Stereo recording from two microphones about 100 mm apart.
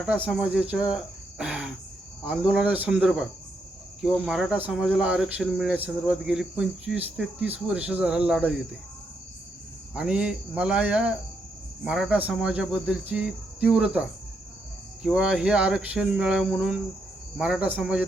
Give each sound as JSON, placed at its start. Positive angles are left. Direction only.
{"t": 0.0, "sound": "speech", "side_deg": -10}
{"t": 9.9, "sound": "speech", "side_deg": -10}
{"t": 15.0, "sound": "speech", "side_deg": -10}